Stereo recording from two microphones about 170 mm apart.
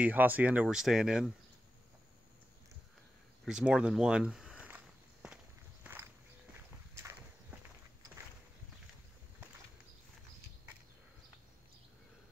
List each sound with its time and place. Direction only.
0.0 s speech: 10° right (ahead or behind)
3.4 s walk: 5° right (ahead or behind)